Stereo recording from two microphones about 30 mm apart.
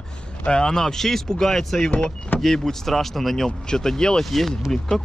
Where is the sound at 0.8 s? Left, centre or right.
Centre.